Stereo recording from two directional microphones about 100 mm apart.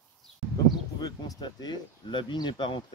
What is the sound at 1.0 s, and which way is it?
Speech, 40° left (ahead or behind).